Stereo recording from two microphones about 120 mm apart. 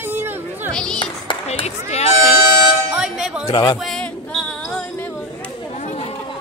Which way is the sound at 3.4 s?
40° left (ahead or behind).